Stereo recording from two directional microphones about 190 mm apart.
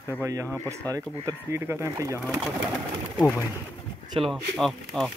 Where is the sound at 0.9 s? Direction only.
15° right (ahead or behind).